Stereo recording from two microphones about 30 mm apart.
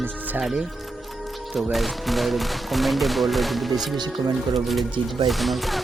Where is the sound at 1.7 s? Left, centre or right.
Centre.